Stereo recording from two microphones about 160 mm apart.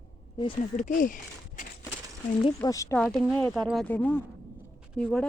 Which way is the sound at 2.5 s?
20° left (ahead or behind).